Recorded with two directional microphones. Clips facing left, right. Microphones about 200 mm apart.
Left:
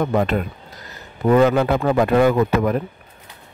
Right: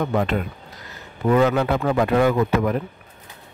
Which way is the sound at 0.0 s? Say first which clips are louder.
Left 3 dB; 40° left (ahead or behind).